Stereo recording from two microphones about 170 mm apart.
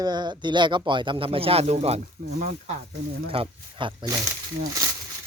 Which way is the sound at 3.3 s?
30° right (ahead or behind).